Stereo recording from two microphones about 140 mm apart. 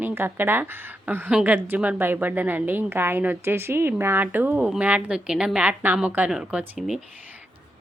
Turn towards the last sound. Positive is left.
turn(degrees=-5)  # may be behind; listen again after turning